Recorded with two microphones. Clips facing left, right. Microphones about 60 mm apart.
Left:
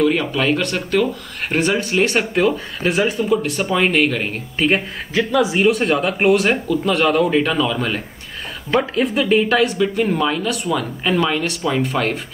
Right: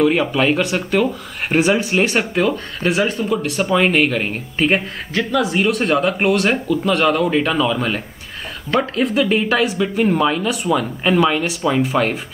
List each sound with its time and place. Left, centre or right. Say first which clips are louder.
0.0 s speech: right 2 dB; centre